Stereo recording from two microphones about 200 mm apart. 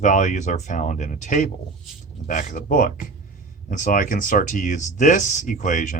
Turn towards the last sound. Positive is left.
turn(degrees=40)  # may be behind; listen again after turning